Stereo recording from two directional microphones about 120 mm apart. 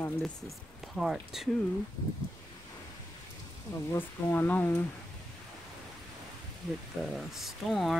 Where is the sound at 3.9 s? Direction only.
20° left (ahead or behind).